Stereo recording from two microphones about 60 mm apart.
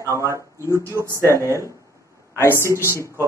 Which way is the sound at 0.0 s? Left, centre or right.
Right.